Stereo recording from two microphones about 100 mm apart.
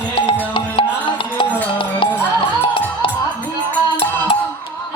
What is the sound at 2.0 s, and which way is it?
Music, 65° left (ahead or behind).